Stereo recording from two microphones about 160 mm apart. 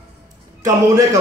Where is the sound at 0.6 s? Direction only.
20° right (ahead or behind).